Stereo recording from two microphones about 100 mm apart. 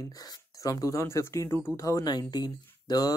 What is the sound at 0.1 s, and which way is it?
Speech, 40° left (ahead or behind).